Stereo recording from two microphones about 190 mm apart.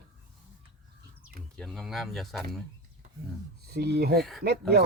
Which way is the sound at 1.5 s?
Centre (ahead or behind).